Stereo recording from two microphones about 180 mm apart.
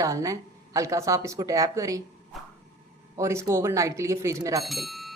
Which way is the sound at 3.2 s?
15° right (ahead or behind).